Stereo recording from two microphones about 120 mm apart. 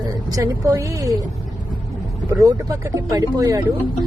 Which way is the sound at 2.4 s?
30° right (ahead or behind).